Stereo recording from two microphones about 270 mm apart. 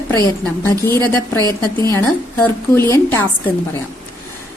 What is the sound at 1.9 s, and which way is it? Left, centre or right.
A woman's voice, centre.